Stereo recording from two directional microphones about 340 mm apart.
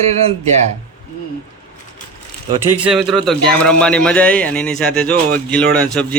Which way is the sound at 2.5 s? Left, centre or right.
Centre.